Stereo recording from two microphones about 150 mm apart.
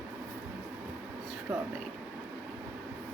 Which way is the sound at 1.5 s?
15° right (ahead or behind).